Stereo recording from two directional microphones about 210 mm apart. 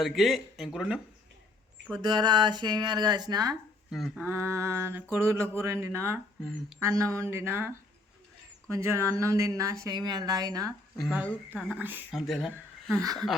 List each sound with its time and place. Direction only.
0.0 s a woman's voice: centre (ahead or behind)
2.0 s speech: 20° right (ahead or behind)
3.5 s speech: centre (ahead or behind)
4.3 s speech: 15° right (ahead or behind)
6.4 s a woman's voice: 5° left (ahead or behind)
6.7 s speech: 10° right (ahead or behind)
10.7 s a woman's voice: centre (ahead or behind)